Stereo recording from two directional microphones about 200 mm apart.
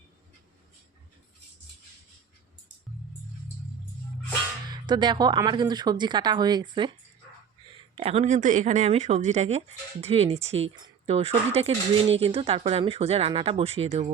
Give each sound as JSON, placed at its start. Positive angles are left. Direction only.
{"t": 4.7, "sound": "speech", "side_deg": -20}
{"t": 7.9, "sound": "speech", "side_deg": -30}